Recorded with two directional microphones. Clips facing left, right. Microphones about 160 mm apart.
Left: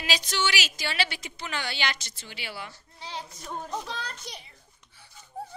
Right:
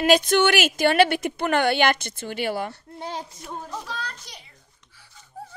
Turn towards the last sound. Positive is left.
turn(degrees=20)  # may be behind; listen again after turning